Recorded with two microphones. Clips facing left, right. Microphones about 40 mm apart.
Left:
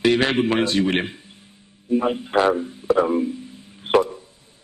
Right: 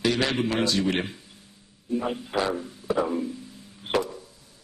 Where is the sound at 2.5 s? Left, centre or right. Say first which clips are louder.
Left 7 dB; left.